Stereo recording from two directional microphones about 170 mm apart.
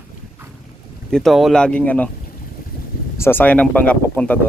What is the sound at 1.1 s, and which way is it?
Speech, centre (ahead or behind).